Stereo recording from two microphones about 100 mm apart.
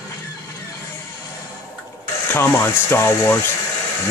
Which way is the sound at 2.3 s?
25° left (ahead or behind).